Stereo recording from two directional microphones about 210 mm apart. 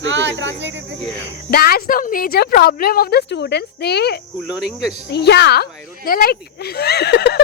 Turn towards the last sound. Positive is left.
turn(degrees=50)  # may be behind; listen again after turning